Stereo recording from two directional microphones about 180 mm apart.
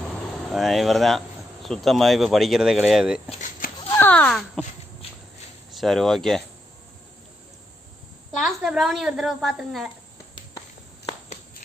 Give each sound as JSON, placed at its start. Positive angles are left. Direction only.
{"t": 0.5, "sound": "a woman's voice", "side_deg": 0}
{"t": 3.9, "sound": "speech", "side_deg": 10}
{"t": 5.0, "sound": "a sound", "side_deg": 30}
{"t": 5.7, "sound": "speech", "side_deg": 0}
{"t": 8.4, "sound": "a woman's voice", "side_deg": 0}